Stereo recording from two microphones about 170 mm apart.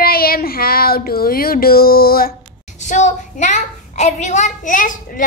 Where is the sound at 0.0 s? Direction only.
60° left (ahead or behind).